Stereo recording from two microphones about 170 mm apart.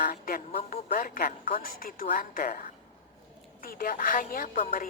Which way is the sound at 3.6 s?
55° left (ahead or behind).